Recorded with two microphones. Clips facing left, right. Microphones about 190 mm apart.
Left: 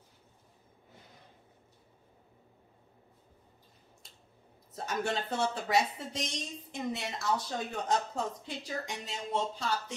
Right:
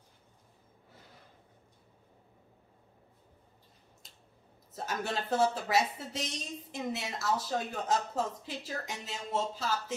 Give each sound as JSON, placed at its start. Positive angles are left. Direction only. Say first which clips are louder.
{"t": 4.7, "sound": "a woman's voice", "louder": "left 2 dB", "side_deg": 0}